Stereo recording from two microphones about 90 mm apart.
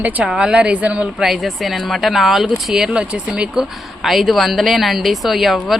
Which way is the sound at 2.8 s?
15° right (ahead or behind).